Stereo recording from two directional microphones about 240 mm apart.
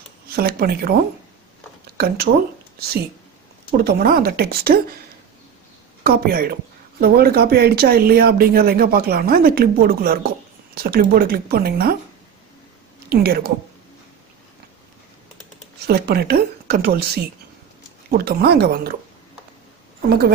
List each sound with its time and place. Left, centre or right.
0.3 s speech: right
2.0 s speech: right
3.7 s speech: right
6.0 s speech: right
13.1 s speech: right
15.8 s speech: right
20.1 s speech: right